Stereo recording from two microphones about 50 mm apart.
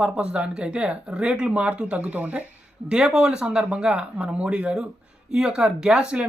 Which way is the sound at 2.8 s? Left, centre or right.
Centre.